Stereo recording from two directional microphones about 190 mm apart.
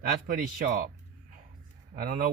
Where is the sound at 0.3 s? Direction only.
45° right (ahead or behind).